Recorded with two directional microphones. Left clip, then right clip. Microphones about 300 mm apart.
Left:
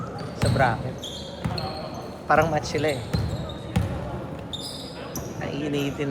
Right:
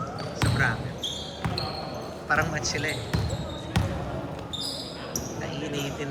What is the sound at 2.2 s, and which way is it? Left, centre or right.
Speech, centre.